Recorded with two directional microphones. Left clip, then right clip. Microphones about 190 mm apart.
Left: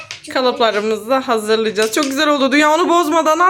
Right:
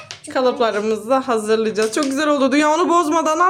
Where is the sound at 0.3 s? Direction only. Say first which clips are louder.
Left 2 dB; 5° left (ahead or behind).